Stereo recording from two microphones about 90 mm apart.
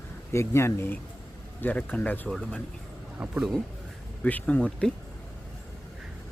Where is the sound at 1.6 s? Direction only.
15° left (ahead or behind).